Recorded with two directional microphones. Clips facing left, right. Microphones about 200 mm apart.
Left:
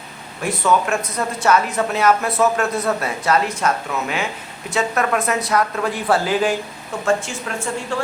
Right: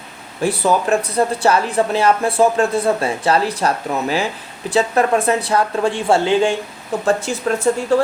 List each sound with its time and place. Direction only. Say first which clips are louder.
0.4 s a woman's voice: right 2 dB; 35° right (ahead or behind)